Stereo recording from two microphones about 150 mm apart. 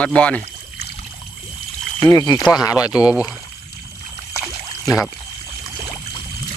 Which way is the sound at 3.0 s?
5° right (ahead or behind).